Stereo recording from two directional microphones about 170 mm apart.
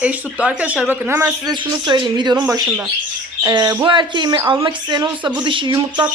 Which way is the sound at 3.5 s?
25° right (ahead or behind).